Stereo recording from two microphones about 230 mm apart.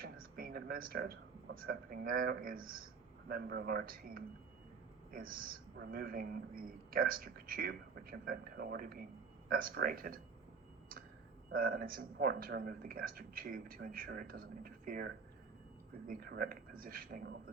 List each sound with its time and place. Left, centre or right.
0.0 s a woman's voice: right
11.5 s a woman's voice: right